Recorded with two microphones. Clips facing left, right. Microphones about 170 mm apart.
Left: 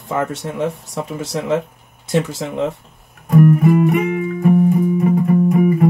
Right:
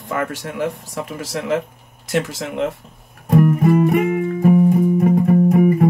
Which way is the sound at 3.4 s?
45° right (ahead or behind).